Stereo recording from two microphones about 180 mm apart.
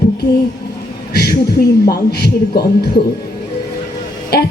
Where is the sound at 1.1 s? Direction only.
60° left (ahead or behind).